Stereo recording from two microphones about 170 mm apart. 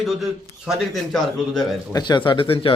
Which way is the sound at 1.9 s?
25° left (ahead or behind).